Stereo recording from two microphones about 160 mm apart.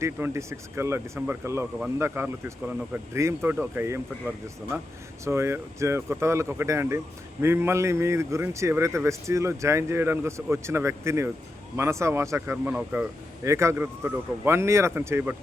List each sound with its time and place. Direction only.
0.0 s a man's voice: 15° right (ahead or behind)
5.2 s a man's voice: 15° right (ahead or behind)